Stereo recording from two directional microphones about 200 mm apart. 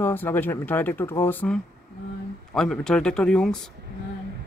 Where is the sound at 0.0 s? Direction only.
10° left (ahead or behind).